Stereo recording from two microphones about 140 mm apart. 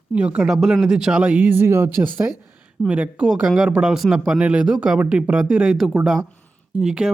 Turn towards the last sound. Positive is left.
turn(degrees=-5)  # may be behind; listen again after turning